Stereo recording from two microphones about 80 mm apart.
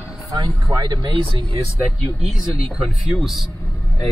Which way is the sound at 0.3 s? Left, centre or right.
Right.